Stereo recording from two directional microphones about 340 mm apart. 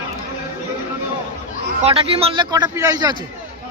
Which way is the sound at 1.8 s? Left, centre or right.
Centre.